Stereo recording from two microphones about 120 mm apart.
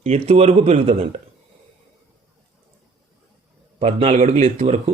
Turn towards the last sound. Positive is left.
turn(degrees=-60)  # may be behind; listen again after turning